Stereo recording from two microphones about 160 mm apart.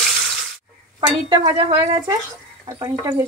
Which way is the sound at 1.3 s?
25° right (ahead or behind).